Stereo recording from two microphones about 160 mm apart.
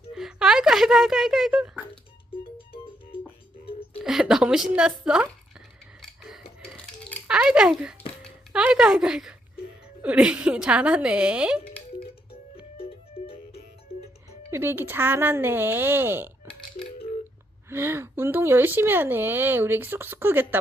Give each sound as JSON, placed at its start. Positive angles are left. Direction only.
{"t": 0.1, "sound": "speech", "side_deg": -5}
{"t": 2.6, "sound": "music", "side_deg": 35}
{"t": 4.0, "sound": "a sound", "side_deg": -5}
{"t": 7.3, "sound": "speech", "side_deg": -5}
{"t": 12.7, "sound": "music", "side_deg": 40}
{"t": 14.5, "sound": "speech", "side_deg": -15}
{"t": 17.7, "sound": "speech", "side_deg": -15}